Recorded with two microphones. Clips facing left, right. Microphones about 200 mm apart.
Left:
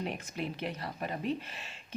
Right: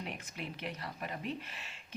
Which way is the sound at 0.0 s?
35° left (ahead or behind).